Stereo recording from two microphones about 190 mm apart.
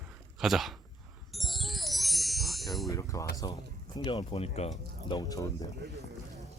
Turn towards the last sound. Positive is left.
turn(degrees=20)  # may be behind; listen again after turning